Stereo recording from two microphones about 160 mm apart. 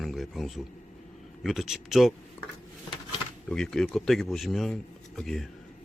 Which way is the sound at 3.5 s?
5° left (ahead or behind).